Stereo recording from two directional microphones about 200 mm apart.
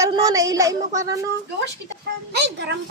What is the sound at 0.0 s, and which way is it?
Speech, 15° right (ahead or behind).